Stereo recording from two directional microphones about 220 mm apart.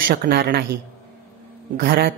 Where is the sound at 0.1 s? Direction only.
45° right (ahead or behind).